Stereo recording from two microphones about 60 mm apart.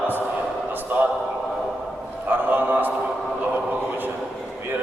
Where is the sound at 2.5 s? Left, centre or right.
Right.